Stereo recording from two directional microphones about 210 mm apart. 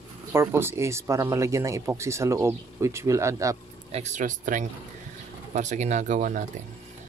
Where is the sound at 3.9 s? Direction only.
30° right (ahead or behind).